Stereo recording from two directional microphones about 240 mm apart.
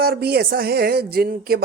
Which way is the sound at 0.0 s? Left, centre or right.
Right.